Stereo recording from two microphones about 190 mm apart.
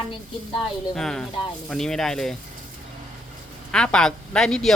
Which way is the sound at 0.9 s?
5° left (ahead or behind).